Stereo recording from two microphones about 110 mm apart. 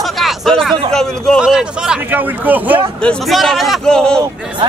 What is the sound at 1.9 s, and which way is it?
Speech, 15° right (ahead or behind).